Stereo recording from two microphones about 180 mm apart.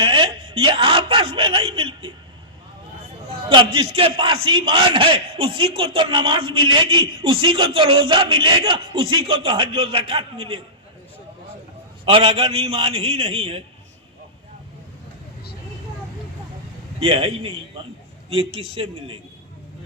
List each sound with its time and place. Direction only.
0.0 s a sound: 30° right (ahead or behind)
3.5 s a man's voice: 30° right (ahead or behind)
12.0 s a man's voice: 30° right (ahead or behind)
17.0 s a man's voice: 35° right (ahead or behind)
18.7 s a man's voice: 30° right (ahead or behind)